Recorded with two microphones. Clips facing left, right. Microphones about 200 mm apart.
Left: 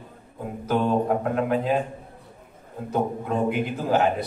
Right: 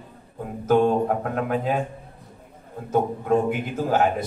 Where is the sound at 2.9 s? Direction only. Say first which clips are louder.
Right 4 dB; 45° right (ahead or behind).